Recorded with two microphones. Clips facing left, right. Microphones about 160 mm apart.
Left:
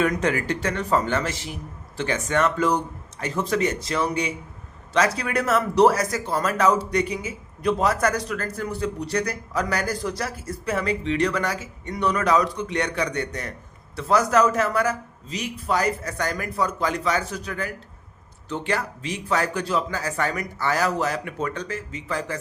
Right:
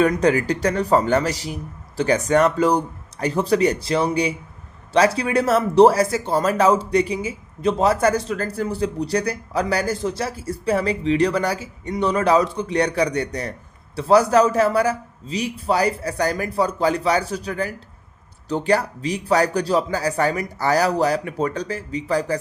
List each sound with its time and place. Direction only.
0.0 s speech: 35° right (ahead or behind)